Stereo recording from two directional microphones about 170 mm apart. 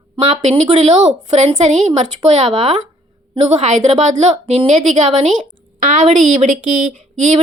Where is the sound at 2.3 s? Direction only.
35° right (ahead or behind).